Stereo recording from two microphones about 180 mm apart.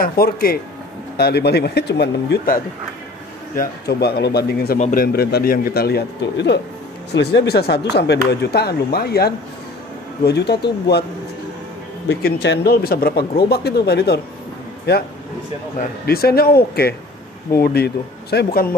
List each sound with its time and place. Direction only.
0.0 s a man's voice: 55° left (ahead or behind)
4.7 s a man's voice: 45° left (ahead or behind); by 11.1 s 65° left (ahead or behind)
12.1 s a man's voice: 60° left (ahead or behind)
16.1 s a man's voice: 60° left (ahead or behind)